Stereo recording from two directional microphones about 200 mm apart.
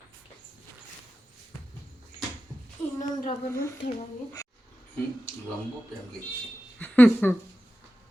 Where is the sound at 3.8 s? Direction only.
60° left (ahead or behind).